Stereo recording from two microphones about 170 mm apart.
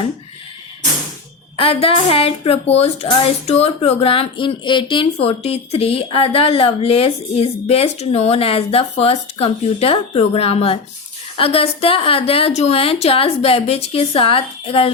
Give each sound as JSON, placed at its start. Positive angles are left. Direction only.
{"t": 1.5, "sound": "speech", "side_deg": 35}